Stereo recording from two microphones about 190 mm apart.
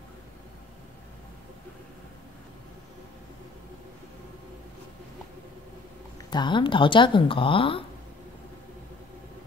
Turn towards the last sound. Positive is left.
turn(degrees=30)  # may be behind; listen again after turning